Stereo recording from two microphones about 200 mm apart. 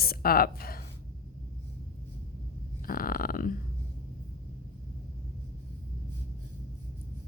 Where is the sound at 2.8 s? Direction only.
45° left (ahead or behind).